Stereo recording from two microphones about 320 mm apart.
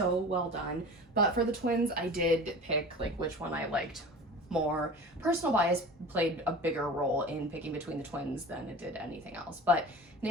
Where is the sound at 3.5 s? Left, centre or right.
Centre.